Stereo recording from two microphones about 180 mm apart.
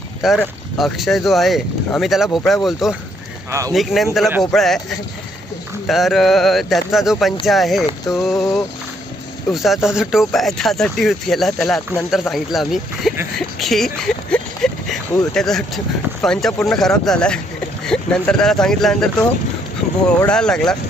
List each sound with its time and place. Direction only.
0.2 s speech: centre (ahead or behind)
19.8 s boat: 40° left (ahead or behind)
20.2 s speech: 5° left (ahead or behind)